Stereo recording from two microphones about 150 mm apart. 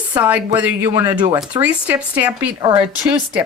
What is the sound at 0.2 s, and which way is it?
Speech, 10° right (ahead or behind).